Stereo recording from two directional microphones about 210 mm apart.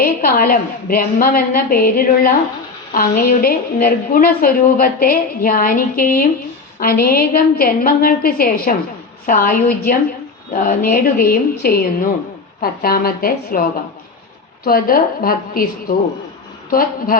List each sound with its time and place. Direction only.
0.0 s a woman's voice: 45° left (ahead or behind)